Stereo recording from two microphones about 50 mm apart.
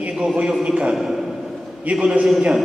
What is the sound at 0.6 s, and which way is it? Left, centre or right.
Speech, right.